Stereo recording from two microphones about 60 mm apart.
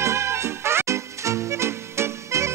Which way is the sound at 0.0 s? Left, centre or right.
Right.